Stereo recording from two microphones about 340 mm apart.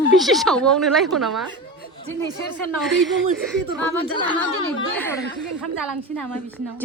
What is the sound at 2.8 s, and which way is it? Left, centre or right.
Speech, centre.